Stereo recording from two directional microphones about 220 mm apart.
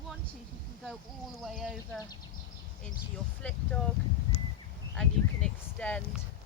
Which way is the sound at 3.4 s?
5° left (ahead or behind).